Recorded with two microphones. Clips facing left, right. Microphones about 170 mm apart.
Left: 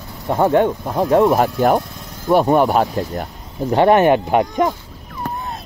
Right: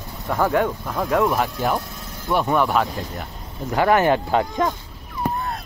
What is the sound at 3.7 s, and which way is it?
Speech, 25° left (ahead or behind).